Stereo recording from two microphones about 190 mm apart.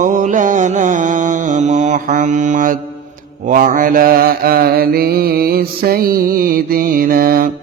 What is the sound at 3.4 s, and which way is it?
Mantra, 45° right (ahead or behind).